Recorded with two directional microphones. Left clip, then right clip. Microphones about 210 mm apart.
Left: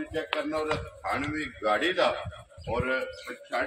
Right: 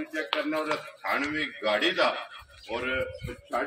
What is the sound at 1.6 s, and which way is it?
Speech, 20° left (ahead or behind).